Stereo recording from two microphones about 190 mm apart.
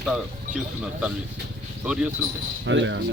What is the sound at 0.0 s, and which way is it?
Speech, 5° right (ahead or behind).